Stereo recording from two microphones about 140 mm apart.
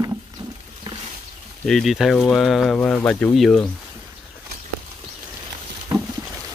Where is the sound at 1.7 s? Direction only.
Centre (ahead or behind).